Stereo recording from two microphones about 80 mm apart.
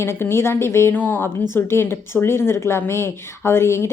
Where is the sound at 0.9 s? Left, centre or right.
Left.